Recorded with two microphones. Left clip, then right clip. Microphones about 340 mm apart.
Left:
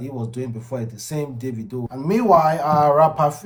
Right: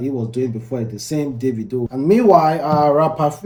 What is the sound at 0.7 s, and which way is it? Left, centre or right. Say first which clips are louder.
Speech: right 1 dB; left.